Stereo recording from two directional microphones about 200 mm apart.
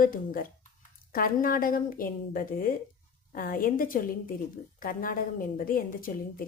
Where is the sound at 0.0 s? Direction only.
45° left (ahead or behind).